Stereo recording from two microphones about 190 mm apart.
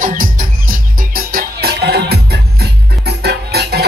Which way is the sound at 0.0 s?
45° right (ahead or behind).